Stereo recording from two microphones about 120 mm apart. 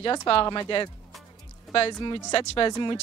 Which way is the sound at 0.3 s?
50° left (ahead or behind).